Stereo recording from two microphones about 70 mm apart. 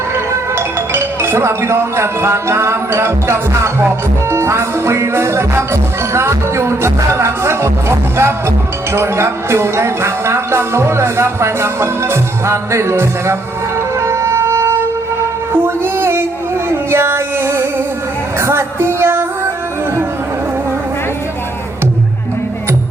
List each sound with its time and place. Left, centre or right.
0.5 s speech: right
4.3 s music: right
15.6 s a sound: right
16.6 s music: right
18.3 s female singing: right